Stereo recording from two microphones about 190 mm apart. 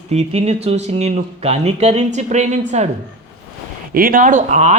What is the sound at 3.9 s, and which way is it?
Speech, 50° right (ahead or behind).